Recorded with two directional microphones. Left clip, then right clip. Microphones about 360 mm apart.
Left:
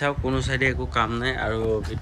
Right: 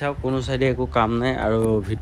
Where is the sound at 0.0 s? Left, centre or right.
Centre.